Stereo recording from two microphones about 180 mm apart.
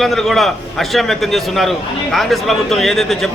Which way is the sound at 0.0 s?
Centre (ahead or behind).